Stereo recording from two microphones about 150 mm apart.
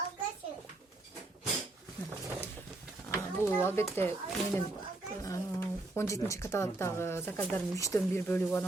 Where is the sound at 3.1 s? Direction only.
15° left (ahead or behind).